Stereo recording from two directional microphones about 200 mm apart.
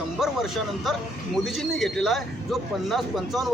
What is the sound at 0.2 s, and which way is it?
A man's voice, centre (ahead or behind).